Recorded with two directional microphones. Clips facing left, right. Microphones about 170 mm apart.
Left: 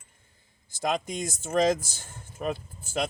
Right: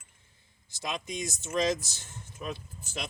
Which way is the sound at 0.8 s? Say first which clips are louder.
Left 6 dB; 50° left (ahead or behind).